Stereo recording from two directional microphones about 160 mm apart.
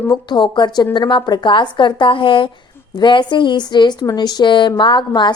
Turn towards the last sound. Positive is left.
turn(degrees=30)  # may be behind; listen again after turning